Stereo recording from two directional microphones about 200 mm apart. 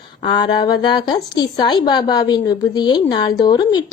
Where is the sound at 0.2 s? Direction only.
20° left (ahead or behind).